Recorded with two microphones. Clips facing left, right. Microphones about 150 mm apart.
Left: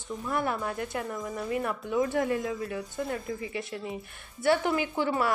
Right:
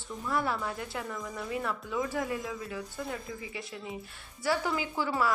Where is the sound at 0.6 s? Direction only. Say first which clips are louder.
Left 4 dB; 50° left (ahead or behind).